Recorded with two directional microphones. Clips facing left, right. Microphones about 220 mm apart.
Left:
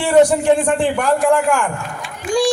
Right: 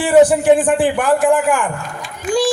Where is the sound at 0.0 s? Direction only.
5° right (ahead or behind).